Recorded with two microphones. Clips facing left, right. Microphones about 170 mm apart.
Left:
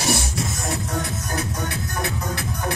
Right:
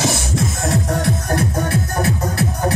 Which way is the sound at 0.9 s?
60° right (ahead or behind).